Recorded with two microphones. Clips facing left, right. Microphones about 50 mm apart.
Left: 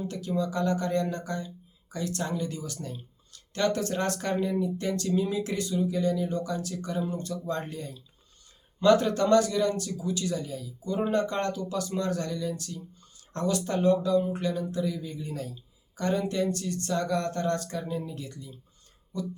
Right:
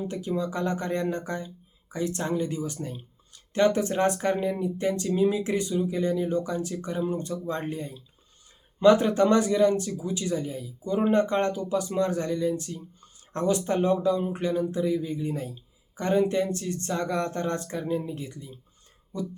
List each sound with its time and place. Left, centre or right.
0.0 s speech: right